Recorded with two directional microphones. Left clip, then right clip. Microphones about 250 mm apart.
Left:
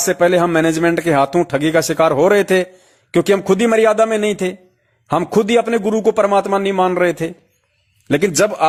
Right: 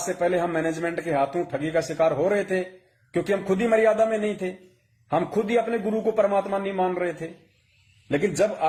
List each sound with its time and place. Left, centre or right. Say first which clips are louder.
0.1 s a man's voice: left 10 dB; left